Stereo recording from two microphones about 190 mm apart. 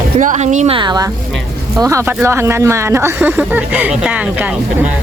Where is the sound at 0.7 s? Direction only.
20° right (ahead or behind).